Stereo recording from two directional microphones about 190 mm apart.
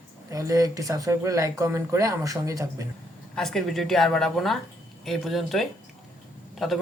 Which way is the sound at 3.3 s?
Centre (ahead or behind).